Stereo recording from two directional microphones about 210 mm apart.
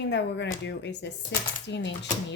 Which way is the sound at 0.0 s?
60° left (ahead or behind).